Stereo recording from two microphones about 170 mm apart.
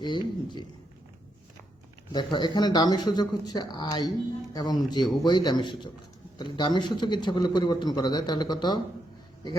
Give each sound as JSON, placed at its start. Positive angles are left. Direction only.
{"t": 0.0, "sound": "a man's voice", "side_deg": 25}
{"t": 2.1, "sound": "a man's voice", "side_deg": 25}